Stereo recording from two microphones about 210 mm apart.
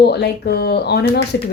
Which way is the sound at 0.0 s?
50° left (ahead or behind).